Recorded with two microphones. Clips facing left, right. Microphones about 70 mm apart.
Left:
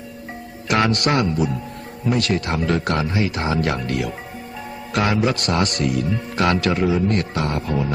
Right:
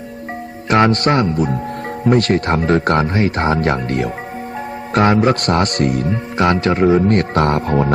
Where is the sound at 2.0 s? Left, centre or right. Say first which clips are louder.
Right 6 dB; right.